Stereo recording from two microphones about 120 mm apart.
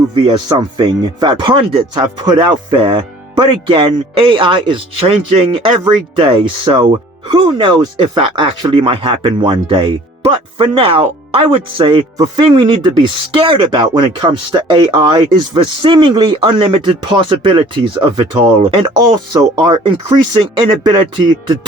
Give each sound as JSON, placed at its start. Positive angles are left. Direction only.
{"t": 0.1, "sound": "speech", "side_deg": -40}
{"t": 19.3, "sound": "speech", "side_deg": -35}
{"t": 20.3, "sound": "speech", "side_deg": -45}